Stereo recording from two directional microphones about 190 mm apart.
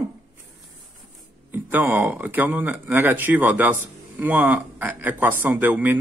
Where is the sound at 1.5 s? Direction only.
10° right (ahead or behind).